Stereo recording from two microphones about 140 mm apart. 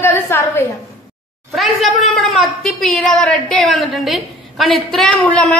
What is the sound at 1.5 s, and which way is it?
A woman's voice, centre (ahead or behind).